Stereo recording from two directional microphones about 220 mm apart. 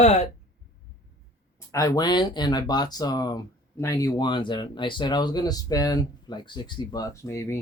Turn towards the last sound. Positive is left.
turn(degrees=10)  # may be behind; listen again after turning